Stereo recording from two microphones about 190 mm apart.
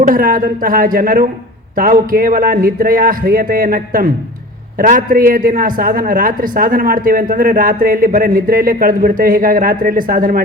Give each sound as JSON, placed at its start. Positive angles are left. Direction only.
{"t": 0.1, "sound": "a woman's voice", "side_deg": -45}